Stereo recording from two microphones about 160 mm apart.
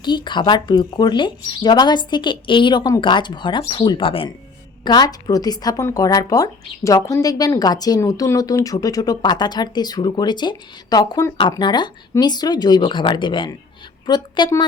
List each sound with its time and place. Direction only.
0.0 s a woman's voice: 30° left (ahead or behind)